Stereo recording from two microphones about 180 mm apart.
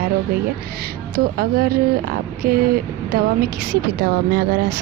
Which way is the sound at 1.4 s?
55° right (ahead or behind).